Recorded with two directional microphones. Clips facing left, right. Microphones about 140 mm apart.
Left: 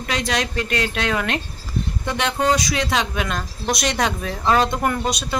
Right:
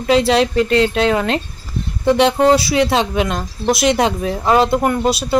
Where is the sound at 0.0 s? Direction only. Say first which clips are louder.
Right 10 dB; 30° right (ahead or behind).